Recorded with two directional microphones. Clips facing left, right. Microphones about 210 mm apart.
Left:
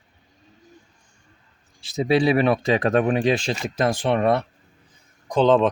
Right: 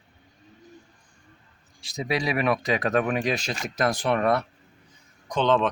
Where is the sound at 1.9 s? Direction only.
30° left (ahead or behind).